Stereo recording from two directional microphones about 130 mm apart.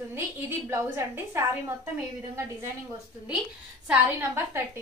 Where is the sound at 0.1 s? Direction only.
20° right (ahead or behind).